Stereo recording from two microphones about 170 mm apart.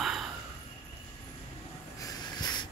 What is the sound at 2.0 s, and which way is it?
Snort, 25° left (ahead or behind).